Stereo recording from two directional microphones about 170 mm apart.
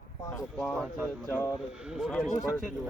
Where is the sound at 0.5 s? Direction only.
5° left (ahead or behind).